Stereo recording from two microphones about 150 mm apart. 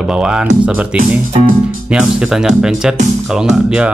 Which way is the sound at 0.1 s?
5° right (ahead or behind).